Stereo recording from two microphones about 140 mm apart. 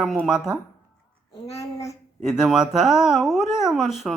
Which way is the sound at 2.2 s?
5° right (ahead or behind).